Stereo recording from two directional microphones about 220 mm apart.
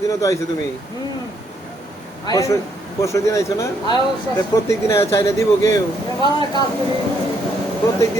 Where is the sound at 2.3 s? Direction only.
15° left (ahead or behind).